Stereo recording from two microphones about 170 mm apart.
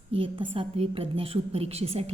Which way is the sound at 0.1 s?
30° right (ahead or behind).